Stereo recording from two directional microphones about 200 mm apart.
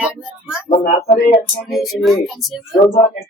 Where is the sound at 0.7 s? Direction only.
40° left (ahead or behind).